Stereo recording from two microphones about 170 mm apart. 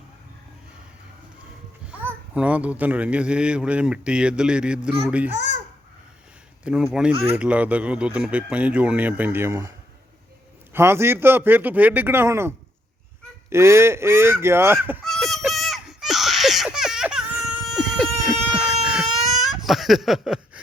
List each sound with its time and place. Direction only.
1.9 s a child's voice: 10° right (ahead or behind)
6.7 s a child's voice: 10° right (ahead or behind)
10.8 s a child's voice: 15° right (ahead or behind)
15.0 s a sound: centre (ahead or behind)
15.4 s baby cry: centre (ahead or behind)
19.5 s a sound: centre (ahead or behind)